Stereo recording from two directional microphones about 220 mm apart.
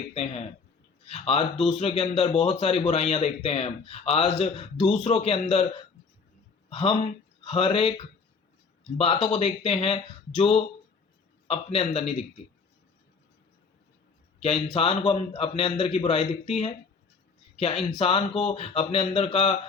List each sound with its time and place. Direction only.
0.1 s a man's voice: 25° left (ahead or behind)
6.7 s a man's voice: 25° left (ahead or behind)
14.4 s a man's voice: 25° left (ahead or behind)